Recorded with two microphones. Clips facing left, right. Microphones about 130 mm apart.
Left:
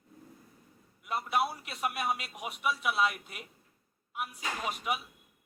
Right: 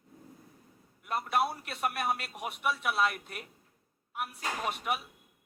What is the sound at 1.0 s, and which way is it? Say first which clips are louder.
Speech: right 1 dB; centre (ahead or behind).